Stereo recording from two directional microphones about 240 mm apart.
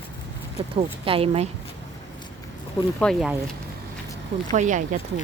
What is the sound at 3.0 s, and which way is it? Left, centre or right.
Speech, centre.